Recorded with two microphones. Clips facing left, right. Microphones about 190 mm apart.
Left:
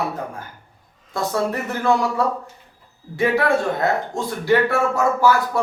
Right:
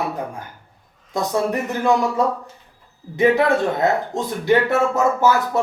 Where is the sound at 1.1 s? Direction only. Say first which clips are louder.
Right 2 dB; 15° right (ahead or behind).